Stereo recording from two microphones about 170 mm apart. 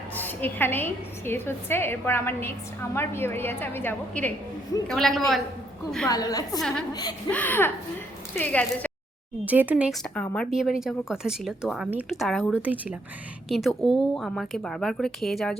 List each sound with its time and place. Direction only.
0.1 s a woman's voice: 10° left (ahead or behind)
6.1 s a woman's voice: 20° left (ahead or behind)
6.6 s a woman's voice: 5° left (ahead or behind)
9.4 s speech: 10° right (ahead or behind)